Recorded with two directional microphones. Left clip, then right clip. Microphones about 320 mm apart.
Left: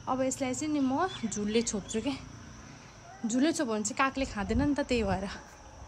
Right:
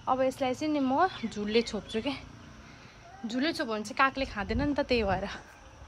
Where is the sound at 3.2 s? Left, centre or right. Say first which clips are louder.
Left 2 dB; centre.